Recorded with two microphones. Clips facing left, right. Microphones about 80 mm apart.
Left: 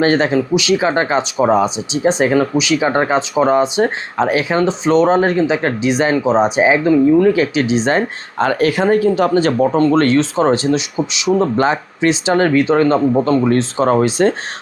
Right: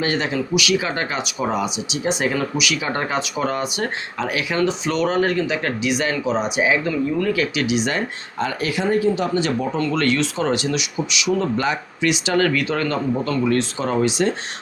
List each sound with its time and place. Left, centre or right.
0.0 s speech: left
8.4 s speech: left